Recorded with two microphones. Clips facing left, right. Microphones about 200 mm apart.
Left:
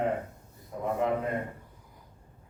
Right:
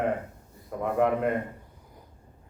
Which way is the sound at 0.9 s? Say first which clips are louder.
Right 5 dB; 65° right (ahead or behind).